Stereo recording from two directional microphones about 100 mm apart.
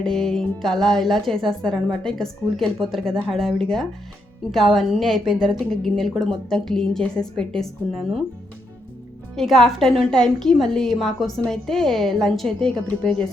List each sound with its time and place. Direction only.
0.0 s a woman's voice: centre (ahead or behind)
9.3 s a woman's voice: centre (ahead or behind)